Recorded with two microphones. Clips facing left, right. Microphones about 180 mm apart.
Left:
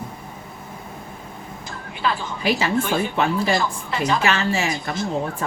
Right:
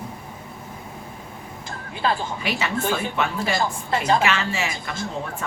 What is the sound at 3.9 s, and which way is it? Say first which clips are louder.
Speech: right 3 dB; 45° right (ahead or behind).